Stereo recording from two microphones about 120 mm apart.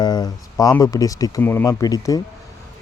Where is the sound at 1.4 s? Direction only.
20° left (ahead or behind).